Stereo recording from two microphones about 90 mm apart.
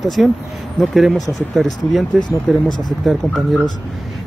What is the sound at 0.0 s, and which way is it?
Speech, centre (ahead or behind).